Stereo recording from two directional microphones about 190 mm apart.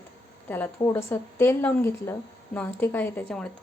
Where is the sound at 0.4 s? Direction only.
10° left (ahead or behind).